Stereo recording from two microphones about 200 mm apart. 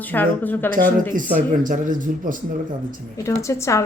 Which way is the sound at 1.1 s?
40° right (ahead or behind).